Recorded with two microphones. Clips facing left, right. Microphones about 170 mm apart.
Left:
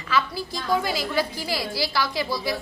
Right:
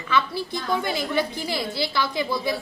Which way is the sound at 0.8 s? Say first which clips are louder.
Right 1 dB; 20° right (ahead or behind).